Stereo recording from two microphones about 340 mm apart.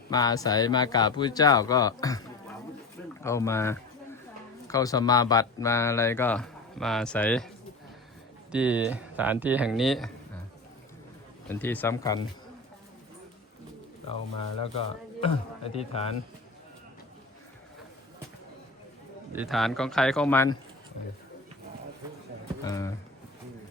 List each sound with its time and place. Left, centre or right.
0.1 s speech: centre
3.2 s a sound: centre
4.7 s speech: centre
8.5 s speech: centre
11.4 s speech: centre
15.2 s speech: centre
19.3 s speech: centre
22.6 s a sound: centre